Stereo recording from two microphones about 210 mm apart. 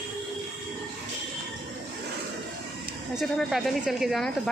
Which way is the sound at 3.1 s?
Centre (ahead or behind).